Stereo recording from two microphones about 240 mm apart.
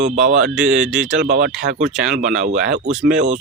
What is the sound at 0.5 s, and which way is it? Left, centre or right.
Speech, centre.